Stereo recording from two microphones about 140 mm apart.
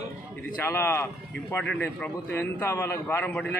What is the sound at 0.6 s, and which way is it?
A man's voice, 15° left (ahead or behind).